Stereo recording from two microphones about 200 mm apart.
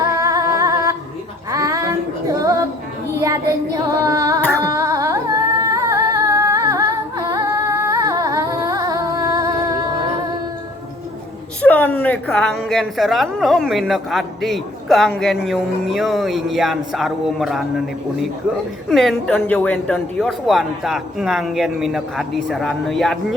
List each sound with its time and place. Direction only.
0.0 s humming: 15° right (ahead or behind)
1.5 s female singing: 15° right (ahead or behind)
3.2 s child singing: 15° right (ahead or behind)
4.6 s singing: 15° right (ahead or behind)
11.6 s a woman's voice: 10° left (ahead or behind)